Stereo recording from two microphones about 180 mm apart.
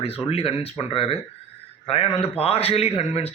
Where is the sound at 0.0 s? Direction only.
30° left (ahead or behind).